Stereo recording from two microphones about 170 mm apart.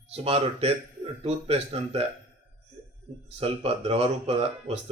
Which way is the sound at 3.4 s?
35° right (ahead or behind).